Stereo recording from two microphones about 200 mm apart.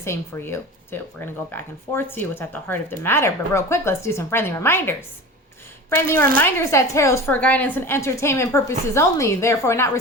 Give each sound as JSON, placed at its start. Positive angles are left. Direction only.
{"t": 0.0, "sound": "speech", "side_deg": 10}